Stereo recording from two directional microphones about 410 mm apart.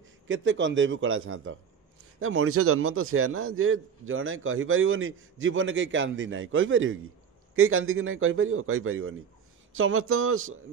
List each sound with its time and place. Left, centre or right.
0.3 s a man's voice: right